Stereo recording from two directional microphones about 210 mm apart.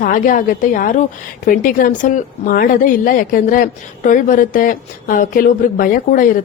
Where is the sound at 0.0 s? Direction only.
40° left (ahead or behind).